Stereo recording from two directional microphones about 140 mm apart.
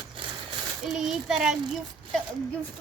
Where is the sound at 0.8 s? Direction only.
5° right (ahead or behind).